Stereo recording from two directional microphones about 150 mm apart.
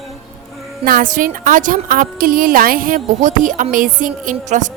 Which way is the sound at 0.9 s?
65° right (ahead or behind).